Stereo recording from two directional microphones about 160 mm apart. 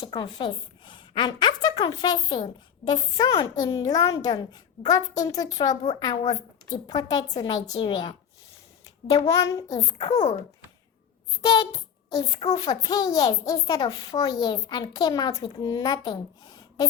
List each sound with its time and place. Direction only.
0.0 s a woman's voice: 25° left (ahead or behind)
9.2 s a woman's voice: 20° left (ahead or behind)
11.4 s a woman's voice: 25° left (ahead or behind)